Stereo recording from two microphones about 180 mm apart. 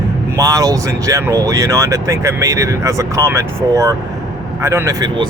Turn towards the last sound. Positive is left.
turn(degrees=-20)  # may be behind; listen again after turning